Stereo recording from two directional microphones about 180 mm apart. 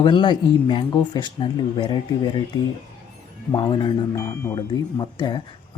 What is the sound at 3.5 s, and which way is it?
Speech, 25° left (ahead or behind).